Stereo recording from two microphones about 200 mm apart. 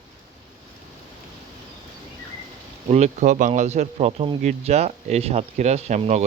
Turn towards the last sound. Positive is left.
turn(degrees=-35)  # may be behind; listen again after turning